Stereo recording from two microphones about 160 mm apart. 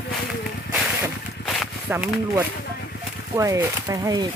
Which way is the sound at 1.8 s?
10° right (ahead or behind).